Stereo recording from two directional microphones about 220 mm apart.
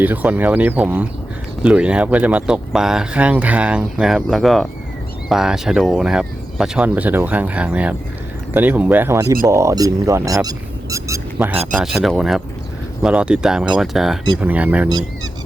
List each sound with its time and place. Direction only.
0.0 s speech: 5° right (ahead or behind)
14.8 s speech: 20° right (ahead or behind)